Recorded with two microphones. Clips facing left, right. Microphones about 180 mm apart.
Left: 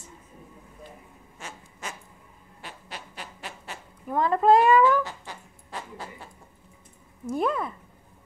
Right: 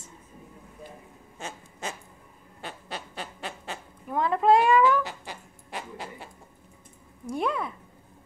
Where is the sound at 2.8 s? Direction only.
30° right (ahead or behind).